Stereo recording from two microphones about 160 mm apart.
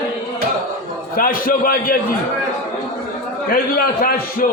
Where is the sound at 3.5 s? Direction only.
65° left (ahead or behind).